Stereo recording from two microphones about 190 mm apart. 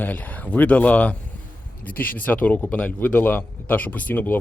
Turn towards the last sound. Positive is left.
turn(degrees=10)  # may be behind; listen again after turning